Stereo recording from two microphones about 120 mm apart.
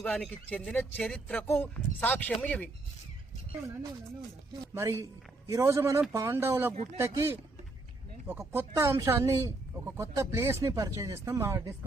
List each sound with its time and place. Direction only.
0.0 s speech: 10° left (ahead or behind)
4.7 s speech: 20° right (ahead or behind)
8.7 s speech: 25° right (ahead or behind)